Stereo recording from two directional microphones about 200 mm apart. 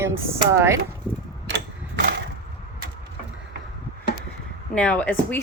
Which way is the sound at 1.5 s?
55° right (ahead or behind).